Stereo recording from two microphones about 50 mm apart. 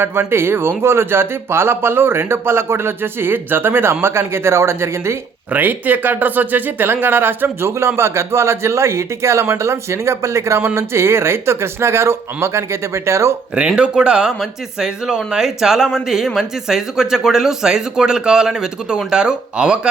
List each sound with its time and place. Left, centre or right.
0.0 s speech: right
5.5 s speech: right
10.8 s speech: right
13.7 s speech: centre